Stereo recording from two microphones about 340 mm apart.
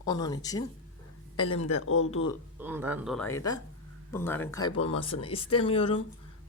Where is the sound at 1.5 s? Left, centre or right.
Left.